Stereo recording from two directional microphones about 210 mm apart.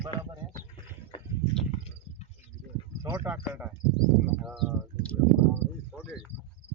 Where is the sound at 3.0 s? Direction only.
5° right (ahead or behind).